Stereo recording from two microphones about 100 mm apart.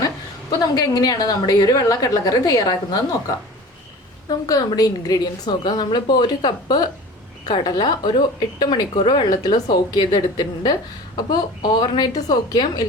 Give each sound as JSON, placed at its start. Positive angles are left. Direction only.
{"t": 0.7, "sound": "a woman's voice", "side_deg": 40}
{"t": 4.3, "sound": "speech", "side_deg": 40}